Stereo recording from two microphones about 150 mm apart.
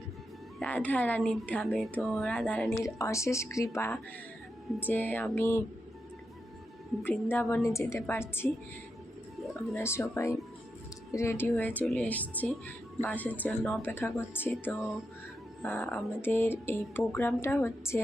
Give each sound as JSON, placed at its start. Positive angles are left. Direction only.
{"t": 0.6, "sound": "a woman's voice", "side_deg": 10}
{"t": 2.8, "sound": "speech", "side_deg": 20}
{"t": 7.3, "sound": "speech", "side_deg": 15}
{"t": 9.7, "sound": "speech", "side_deg": 15}
{"t": 13.8, "sound": "speech", "side_deg": 15}
{"t": 15.6, "sound": "speech", "side_deg": 15}